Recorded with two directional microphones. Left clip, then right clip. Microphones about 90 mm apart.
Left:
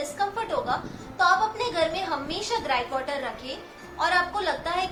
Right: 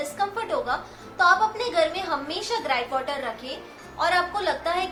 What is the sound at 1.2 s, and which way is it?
A woman's voice, 35° right (ahead or behind).